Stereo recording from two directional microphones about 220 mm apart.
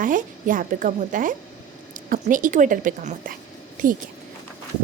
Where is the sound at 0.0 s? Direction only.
35° right (ahead or behind).